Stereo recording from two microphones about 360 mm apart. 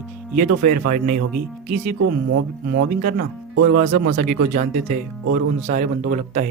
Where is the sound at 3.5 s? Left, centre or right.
Right.